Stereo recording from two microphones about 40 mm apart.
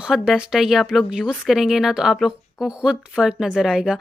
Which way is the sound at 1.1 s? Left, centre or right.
Right.